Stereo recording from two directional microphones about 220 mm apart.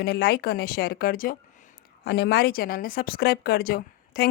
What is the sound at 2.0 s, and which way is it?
Speech, 50° left (ahead or behind).